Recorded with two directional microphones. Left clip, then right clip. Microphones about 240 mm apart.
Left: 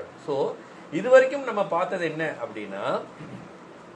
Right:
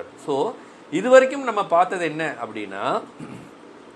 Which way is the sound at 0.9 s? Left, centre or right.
Right.